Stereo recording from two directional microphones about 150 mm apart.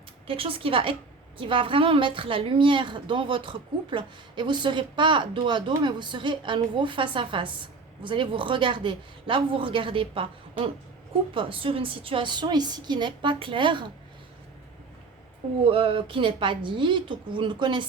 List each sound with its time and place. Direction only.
0.3 s a woman's voice: 40° right (ahead or behind)
11.3 s a woman's voice: 35° right (ahead or behind)
15.6 s a woman's voice: 35° right (ahead or behind)